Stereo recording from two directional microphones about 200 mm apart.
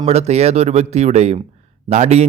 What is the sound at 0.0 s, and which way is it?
Speech, 35° right (ahead or behind).